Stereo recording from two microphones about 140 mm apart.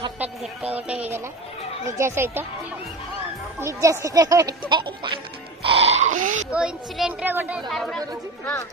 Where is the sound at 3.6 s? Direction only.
20° right (ahead or behind).